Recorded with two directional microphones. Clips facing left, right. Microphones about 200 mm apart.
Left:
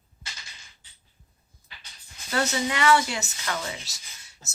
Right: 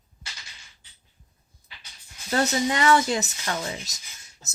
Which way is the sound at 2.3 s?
35° right (ahead or behind).